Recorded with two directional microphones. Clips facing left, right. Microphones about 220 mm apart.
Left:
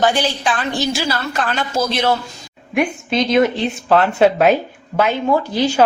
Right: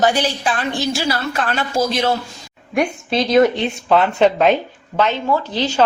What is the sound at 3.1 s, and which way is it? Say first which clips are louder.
Speech: right 2 dB; 30° right (ahead or behind).